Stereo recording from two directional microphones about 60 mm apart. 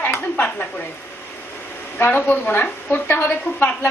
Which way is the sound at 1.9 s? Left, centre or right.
Left.